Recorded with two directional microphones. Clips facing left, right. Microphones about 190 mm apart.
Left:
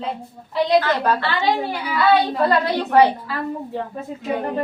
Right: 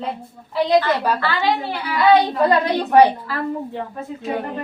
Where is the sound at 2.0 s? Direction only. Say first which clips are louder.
Right 2 dB; 15° right (ahead or behind).